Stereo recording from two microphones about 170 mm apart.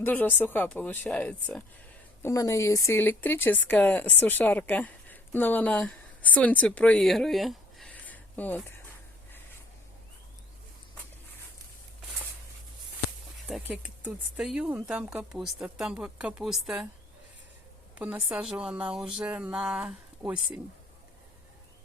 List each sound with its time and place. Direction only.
0.0 s speech: 10° left (ahead or behind)
2.2 s speech: 20° left (ahead or behind)
13.5 s speech: 10° right (ahead or behind)
17.9 s a woman's voice: 10° right (ahead or behind)